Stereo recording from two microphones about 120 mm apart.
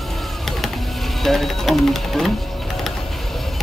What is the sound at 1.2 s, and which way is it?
Speech, centre (ahead or behind).